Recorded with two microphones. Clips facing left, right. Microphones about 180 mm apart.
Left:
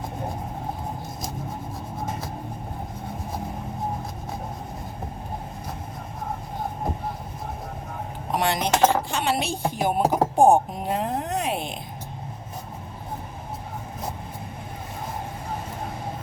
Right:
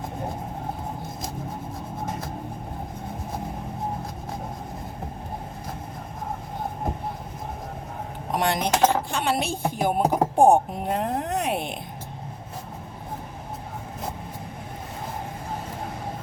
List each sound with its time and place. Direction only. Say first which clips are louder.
8.3 s speech: even; 50° right (ahead or behind)